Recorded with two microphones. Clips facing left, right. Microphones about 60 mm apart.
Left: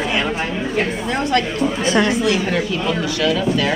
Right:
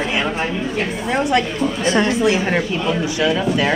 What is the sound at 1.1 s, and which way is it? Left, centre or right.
Speech, centre.